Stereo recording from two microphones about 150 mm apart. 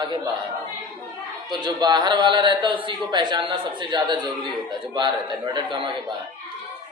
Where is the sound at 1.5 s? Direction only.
30° right (ahead or behind).